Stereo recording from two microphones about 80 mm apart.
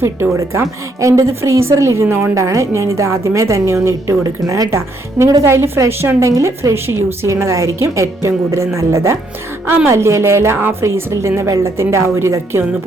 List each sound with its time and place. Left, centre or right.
0.0 s a woman's voice: right